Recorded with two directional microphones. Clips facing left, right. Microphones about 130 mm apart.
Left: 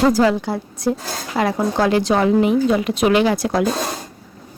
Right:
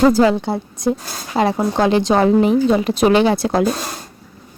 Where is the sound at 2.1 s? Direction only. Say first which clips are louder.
Right 3 dB; 35° right (ahead or behind).